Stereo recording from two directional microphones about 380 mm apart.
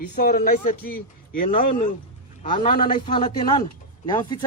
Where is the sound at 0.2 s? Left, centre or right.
Left.